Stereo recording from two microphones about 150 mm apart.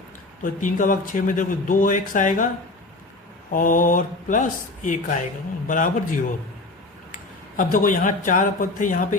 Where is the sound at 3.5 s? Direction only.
65° left (ahead or behind).